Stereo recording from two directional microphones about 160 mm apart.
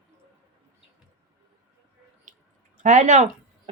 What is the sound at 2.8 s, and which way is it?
Speech, 45° right (ahead or behind).